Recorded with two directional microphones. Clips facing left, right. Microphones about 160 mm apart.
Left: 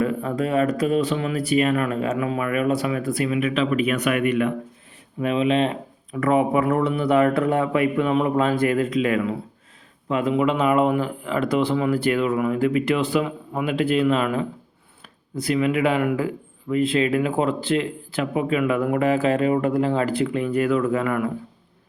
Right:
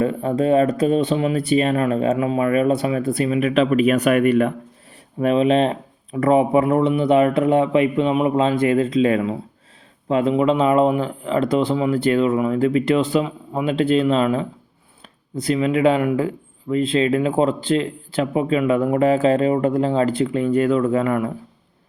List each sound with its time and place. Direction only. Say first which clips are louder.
0.0 s speech: right 4 dB; 30° right (ahead or behind)